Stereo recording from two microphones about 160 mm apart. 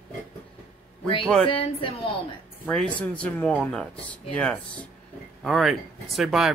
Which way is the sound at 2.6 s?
5° left (ahead or behind).